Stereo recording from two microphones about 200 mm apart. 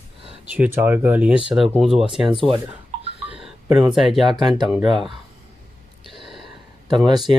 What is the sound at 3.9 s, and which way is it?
Speech, centre (ahead or behind).